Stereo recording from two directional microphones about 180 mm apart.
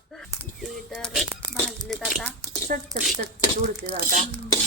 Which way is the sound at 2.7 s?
45° right (ahead or behind).